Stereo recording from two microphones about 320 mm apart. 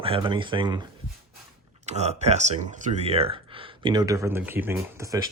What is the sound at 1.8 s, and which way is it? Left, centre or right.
Speech, centre.